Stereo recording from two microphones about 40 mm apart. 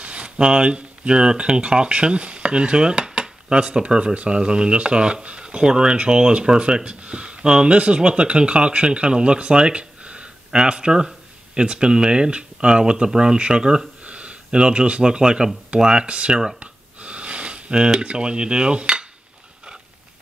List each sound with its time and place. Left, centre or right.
0.0 s speech: right
14.0 s speech: right
16.5 s a sound: right